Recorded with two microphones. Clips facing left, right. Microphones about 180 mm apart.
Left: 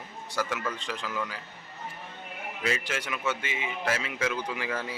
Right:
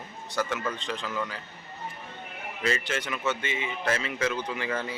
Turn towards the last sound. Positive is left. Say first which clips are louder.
# right 2 dB
turn(degrees=5)  # may be behind; listen again after turning